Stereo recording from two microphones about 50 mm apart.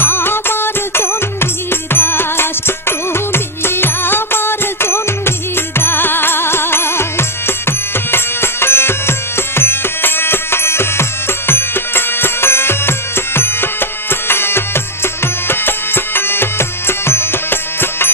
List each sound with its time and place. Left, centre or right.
0.0 s music: left